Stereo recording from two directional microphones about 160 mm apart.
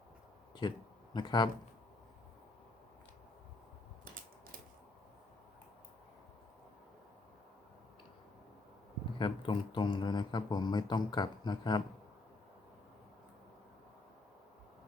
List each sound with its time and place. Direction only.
0.6 s speech: 30° left (ahead or behind)
9.1 s speech: 30° left (ahead or behind)